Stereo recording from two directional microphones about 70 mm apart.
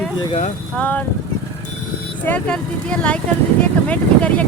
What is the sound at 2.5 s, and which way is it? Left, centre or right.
Speech, centre.